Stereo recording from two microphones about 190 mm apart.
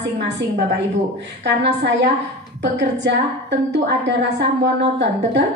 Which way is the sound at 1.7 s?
65° right (ahead or behind).